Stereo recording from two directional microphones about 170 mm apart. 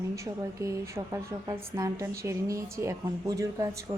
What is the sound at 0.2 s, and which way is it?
A woman's voice, 15° right (ahead or behind).